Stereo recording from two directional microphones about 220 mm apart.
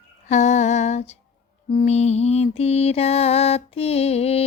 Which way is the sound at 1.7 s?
25° left (ahead or behind).